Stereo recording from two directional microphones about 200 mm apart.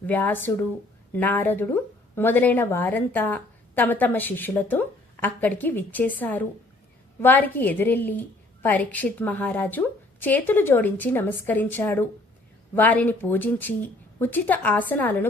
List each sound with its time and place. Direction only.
0.0 s speech: 10° left (ahead or behind)